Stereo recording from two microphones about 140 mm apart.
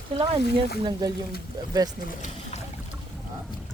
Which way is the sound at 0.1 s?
40° right (ahead or behind).